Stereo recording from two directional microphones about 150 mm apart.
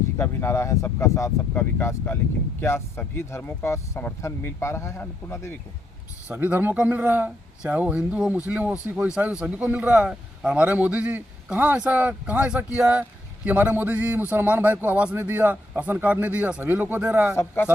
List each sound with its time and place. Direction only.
0.2 s speech: 20° left (ahead or behind)
6.2 s a man's voice: 10° right (ahead or behind)
17.3 s speech: 15° left (ahead or behind)